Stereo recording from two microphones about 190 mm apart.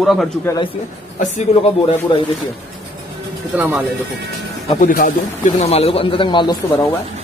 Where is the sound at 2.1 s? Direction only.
30° left (ahead or behind).